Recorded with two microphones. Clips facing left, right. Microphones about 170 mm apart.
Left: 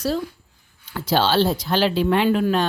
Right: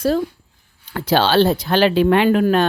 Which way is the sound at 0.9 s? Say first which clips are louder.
Right 4 dB; 65° right (ahead or behind).